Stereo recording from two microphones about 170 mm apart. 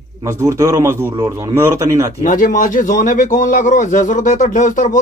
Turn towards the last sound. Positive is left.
turn(degrees=50)  # may be behind; listen again after turning